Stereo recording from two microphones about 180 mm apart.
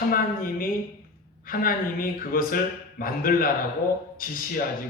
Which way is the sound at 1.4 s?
50° left (ahead or behind).